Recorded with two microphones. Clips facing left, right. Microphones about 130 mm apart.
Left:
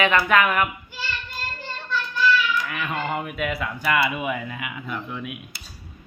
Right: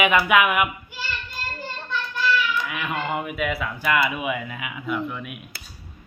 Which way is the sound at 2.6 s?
5° right (ahead or behind).